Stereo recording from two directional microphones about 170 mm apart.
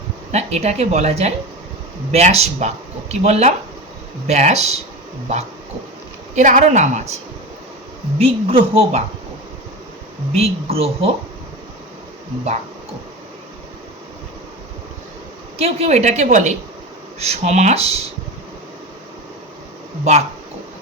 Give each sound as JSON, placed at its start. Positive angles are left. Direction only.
{"t": 0.3, "sound": "speech", "side_deg": -40}
{"t": 6.3, "sound": "a woman's voice", "side_deg": -45}
{"t": 8.2, "sound": "speech", "side_deg": -35}
{"t": 10.3, "sound": "speech", "side_deg": -35}
{"t": 15.5, "sound": "a woman's voice", "side_deg": -35}